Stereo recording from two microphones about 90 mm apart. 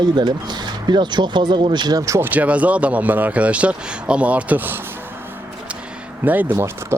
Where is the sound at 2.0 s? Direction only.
30° right (ahead or behind).